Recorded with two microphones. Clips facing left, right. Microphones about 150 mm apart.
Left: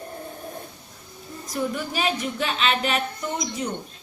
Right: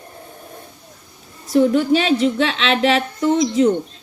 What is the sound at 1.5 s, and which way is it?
A woman's voice, 70° right (ahead or behind).